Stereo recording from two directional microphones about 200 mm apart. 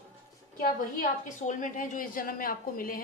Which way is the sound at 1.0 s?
40° left (ahead or behind).